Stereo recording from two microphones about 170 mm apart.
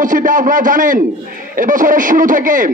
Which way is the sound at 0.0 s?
50° right (ahead or behind).